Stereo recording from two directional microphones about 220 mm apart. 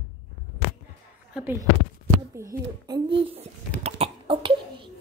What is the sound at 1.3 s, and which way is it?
Speech, 10° right (ahead or behind).